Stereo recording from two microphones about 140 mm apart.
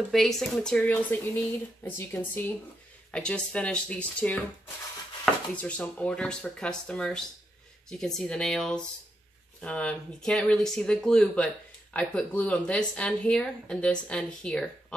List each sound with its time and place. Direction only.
0.1 s speech: centre (ahead or behind)